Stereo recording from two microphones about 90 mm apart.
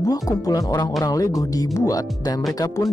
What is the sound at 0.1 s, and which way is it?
Speech, 45° left (ahead or behind).